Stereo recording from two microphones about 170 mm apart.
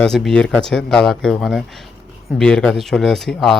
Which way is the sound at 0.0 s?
5° left (ahead or behind).